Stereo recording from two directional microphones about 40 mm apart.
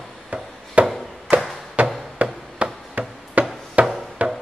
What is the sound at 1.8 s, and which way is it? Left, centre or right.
Chopping, right.